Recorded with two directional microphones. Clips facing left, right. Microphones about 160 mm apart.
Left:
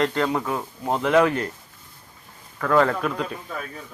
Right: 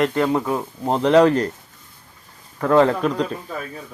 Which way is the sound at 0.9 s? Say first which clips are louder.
Right 5 dB; 30° right (ahead or behind).